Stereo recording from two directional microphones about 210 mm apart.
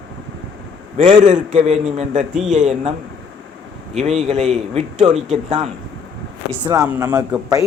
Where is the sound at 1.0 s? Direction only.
35° right (ahead or behind).